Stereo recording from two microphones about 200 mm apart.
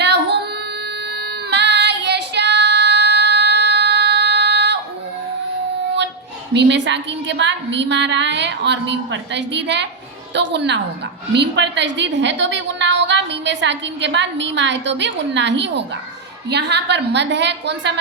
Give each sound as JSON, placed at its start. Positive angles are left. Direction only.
{"t": 0.0, "sound": "female singing", "side_deg": -55}
{"t": 1.1, "sound": "child singing", "side_deg": -55}
{"t": 6.5, "sound": "a woman's voice", "side_deg": -60}